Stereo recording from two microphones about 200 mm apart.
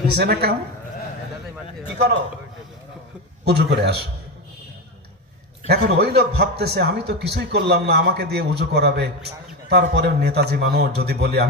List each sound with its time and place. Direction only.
0.1 s a woman's voice: 55° right (ahead or behind)
3.4 s a man's voice: 55° right (ahead or behind)
5.6 s a man's voice: 55° right (ahead or behind)